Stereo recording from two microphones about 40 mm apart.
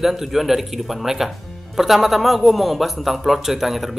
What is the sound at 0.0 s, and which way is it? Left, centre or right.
A man's voice, centre.